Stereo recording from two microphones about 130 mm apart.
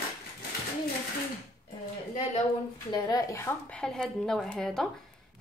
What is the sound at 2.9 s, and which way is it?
Speech, 30° left (ahead or behind).